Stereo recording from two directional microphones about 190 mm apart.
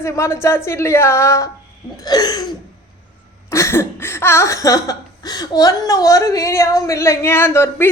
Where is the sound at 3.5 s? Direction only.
15° left (ahead or behind).